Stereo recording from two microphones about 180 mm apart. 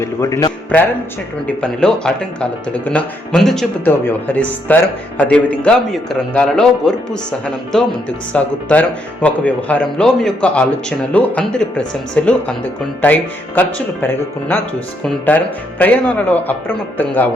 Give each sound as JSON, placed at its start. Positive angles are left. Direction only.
{"t": 0.0, "sound": "speech", "side_deg": 15}
{"t": 1.5, "sound": "speech", "side_deg": 5}